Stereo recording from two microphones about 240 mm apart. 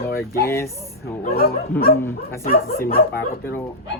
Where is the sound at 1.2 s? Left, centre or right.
Left.